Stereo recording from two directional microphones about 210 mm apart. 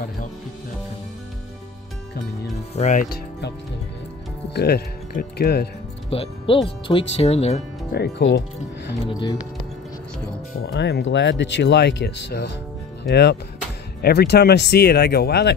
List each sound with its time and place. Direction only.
2.7 s speech: 35° left (ahead or behind)
4.6 s speech: 50° left (ahead or behind)
6.0 s speech: 25° left (ahead or behind)
7.9 s speech: 55° left (ahead or behind)
10.6 s speech: 55° left (ahead or behind)